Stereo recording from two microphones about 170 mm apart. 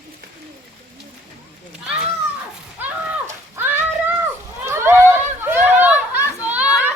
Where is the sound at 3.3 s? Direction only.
10° right (ahead or behind).